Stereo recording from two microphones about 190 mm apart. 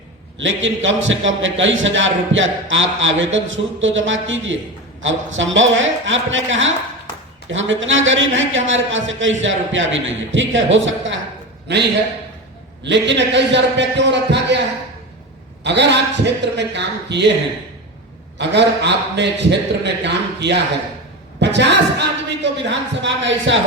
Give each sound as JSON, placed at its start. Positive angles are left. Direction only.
{"t": 0.3, "sound": "a man's voice", "side_deg": -85}
{"t": 12.8, "sound": "speech", "side_deg": -70}
{"t": 15.6, "sound": "a man's voice", "side_deg": -65}
{"t": 18.3, "sound": "a man's voice", "side_deg": -65}